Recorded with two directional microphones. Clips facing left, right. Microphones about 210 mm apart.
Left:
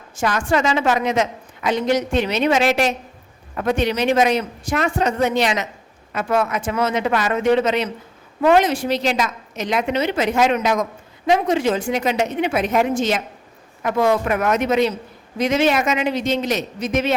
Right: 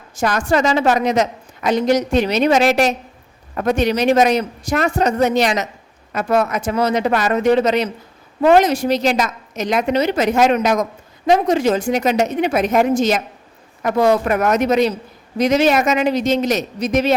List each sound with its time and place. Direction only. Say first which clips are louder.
0.2 s a woman's voice: right 2 dB; 40° right (ahead or behind)